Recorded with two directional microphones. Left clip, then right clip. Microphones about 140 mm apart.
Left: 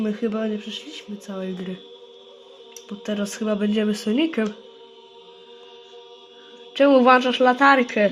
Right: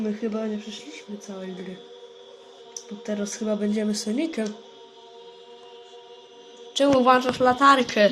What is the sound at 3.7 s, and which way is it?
Speech, 90° left.